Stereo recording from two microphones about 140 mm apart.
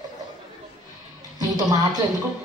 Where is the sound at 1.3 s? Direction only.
25° right (ahead or behind).